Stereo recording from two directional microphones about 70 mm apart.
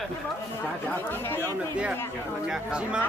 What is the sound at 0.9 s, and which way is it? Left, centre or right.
Speech, left.